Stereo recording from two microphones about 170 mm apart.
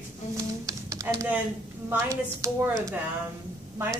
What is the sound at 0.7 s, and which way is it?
Typing, 20° right (ahead or behind).